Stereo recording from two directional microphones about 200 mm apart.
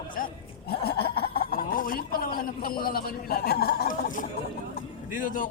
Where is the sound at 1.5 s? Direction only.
45° left (ahead or behind).